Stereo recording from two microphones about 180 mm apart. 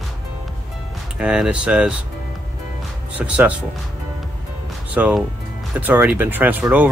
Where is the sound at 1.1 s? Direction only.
5° right (ahead or behind).